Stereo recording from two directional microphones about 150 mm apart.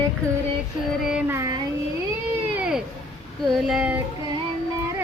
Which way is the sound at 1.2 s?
20° right (ahead or behind).